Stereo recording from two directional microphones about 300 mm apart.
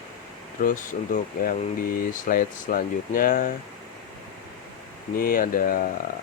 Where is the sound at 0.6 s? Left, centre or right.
Left.